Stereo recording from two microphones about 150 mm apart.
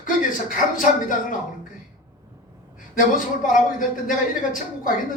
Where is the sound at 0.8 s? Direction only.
60° left (ahead or behind).